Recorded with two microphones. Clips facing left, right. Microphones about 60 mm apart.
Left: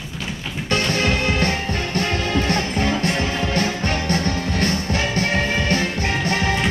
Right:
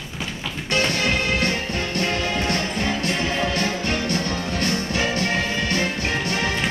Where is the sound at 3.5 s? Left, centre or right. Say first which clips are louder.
Left 2 dB; left.